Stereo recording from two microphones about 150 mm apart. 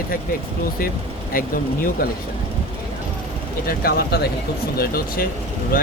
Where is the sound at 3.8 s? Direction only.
85° left.